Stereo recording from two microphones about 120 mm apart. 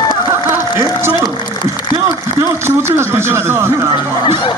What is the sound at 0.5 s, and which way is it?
Music, 20° right (ahead or behind).